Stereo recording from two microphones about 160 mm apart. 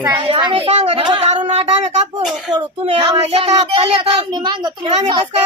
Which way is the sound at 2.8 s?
40° right (ahead or behind).